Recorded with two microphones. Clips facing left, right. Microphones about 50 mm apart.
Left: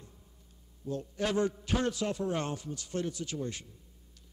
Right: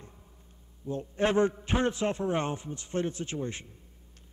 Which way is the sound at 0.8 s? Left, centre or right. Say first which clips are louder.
Right 5 dB; right.